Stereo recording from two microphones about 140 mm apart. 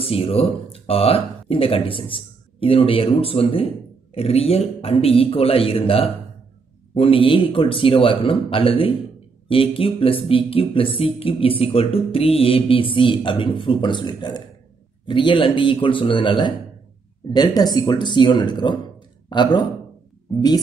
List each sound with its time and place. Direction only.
0.0 s speech: 45° left (ahead or behind)